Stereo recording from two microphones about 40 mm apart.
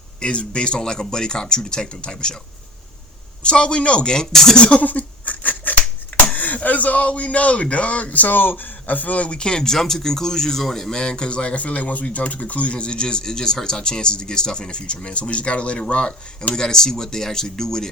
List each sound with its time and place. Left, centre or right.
0.2 s speech: left
3.4 s speech: left
4.1 s speech: centre
4.5 s speech: left
4.9 s a sound: left
6.3 s speech: left; by 17.8 s centre